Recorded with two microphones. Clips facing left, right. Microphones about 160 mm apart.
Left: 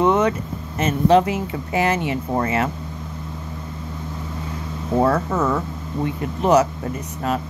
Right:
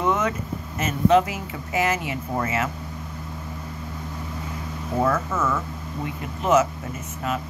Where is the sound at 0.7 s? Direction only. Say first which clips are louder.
Left 3 dB; 30° left (ahead or behind).